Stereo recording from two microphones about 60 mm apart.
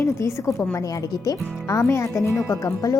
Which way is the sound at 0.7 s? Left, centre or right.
Left.